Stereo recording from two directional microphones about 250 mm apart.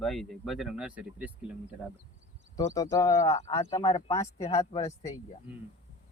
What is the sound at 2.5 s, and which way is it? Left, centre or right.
Speech, centre.